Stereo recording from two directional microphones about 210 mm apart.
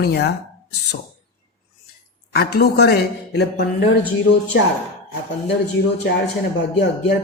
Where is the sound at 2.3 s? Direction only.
50° left (ahead or behind).